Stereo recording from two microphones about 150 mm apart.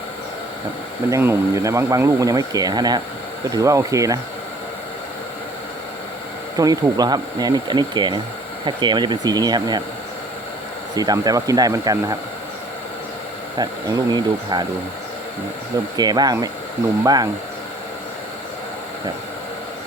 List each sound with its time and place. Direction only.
1.1 s speech: 20° right (ahead or behind)
6.6 s speech: 25° right (ahead or behind)
10.9 s speech: 25° right (ahead or behind)
13.6 s speech: 25° right (ahead or behind)
16.0 s speech: 25° right (ahead or behind)